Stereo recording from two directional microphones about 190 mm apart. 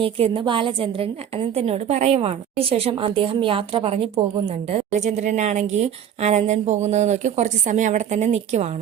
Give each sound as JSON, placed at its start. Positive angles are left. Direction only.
{"t": 0.0, "sound": "a woman's voice", "side_deg": -25}